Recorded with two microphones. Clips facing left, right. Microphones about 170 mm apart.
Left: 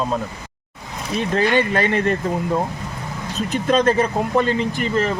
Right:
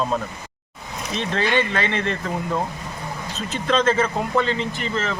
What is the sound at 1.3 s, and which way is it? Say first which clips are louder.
Speech: left 4 dB; 40° left (ahead or behind).